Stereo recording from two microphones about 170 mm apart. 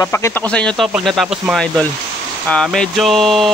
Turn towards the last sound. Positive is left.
turn(degrees=0)  # may be behind; listen again after turning